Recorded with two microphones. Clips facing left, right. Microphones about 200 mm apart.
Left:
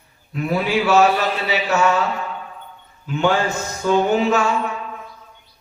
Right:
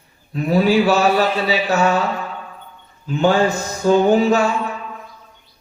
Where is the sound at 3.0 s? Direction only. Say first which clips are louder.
Right 3 dB; 35° right (ahead or behind).